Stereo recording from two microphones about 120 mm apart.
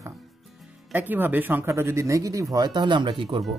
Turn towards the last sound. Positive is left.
turn(degrees=-45)  # may be behind; listen again after turning